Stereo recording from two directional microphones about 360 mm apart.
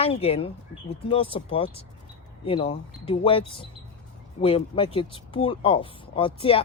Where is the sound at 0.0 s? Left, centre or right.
Centre.